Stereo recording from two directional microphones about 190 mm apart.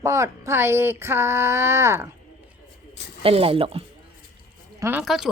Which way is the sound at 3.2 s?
30° right (ahead or behind).